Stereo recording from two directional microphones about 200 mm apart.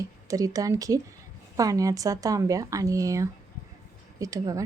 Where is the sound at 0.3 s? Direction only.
15° right (ahead or behind).